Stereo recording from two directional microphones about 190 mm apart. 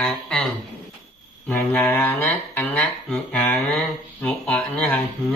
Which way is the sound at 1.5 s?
10° left (ahead or behind).